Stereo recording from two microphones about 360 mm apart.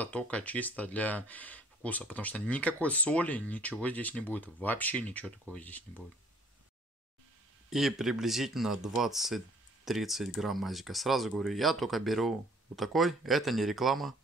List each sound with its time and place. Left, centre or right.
0.0 s speech: centre
7.7 s speech: centre